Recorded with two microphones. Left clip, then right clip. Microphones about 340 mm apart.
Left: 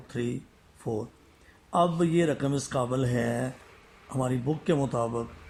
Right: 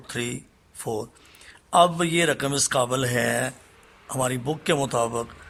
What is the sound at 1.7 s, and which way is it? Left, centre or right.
Speech, right.